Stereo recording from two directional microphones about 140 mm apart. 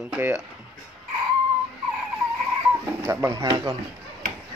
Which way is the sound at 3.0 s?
20° right (ahead or behind).